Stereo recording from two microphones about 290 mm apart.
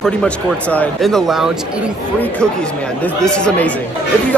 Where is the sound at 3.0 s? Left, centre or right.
Centre.